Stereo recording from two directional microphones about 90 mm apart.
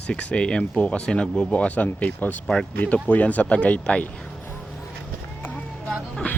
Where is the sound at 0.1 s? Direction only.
15° left (ahead or behind).